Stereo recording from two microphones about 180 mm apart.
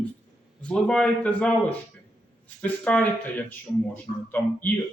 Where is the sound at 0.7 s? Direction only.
5° left (ahead or behind).